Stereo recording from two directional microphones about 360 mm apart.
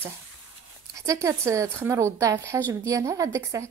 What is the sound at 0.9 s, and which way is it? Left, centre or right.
Speech, centre.